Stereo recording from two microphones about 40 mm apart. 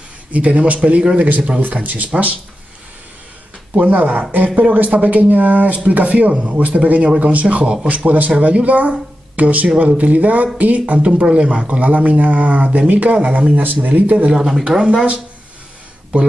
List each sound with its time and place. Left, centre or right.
0.3 s speech: right
3.8 s speech: right
4.5 s speech: right
4.7 s speech: right
13.6 s speech: right
14.1 s speech: centre